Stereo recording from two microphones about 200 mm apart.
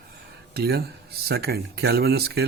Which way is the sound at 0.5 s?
50° right (ahead or behind).